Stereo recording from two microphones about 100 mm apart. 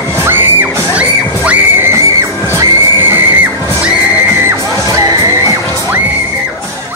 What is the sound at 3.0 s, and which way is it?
Neigh, 20° right (ahead or behind).